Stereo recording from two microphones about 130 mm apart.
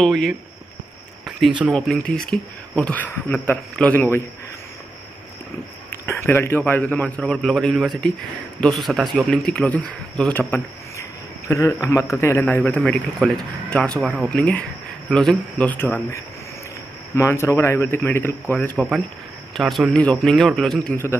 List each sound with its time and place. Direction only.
0.0 s a man's voice: centre (ahead or behind)
1.7 s a man's voice: 5° left (ahead or behind)
5.9 s a man's voice: 15° left (ahead or behind)
10.5 s a man's voice: 20° left (ahead or behind)
18.8 s a man's voice: centre (ahead or behind)